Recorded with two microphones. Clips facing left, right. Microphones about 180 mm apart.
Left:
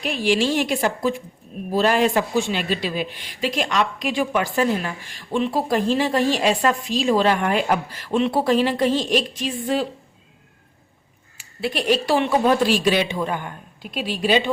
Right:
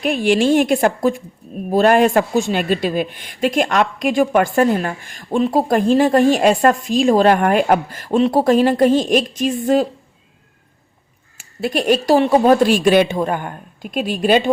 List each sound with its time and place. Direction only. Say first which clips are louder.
0.0 s speech: right 5 dB; 50° right (ahead or behind)
11.3 s speech: right 5 dB; 45° right (ahead or behind)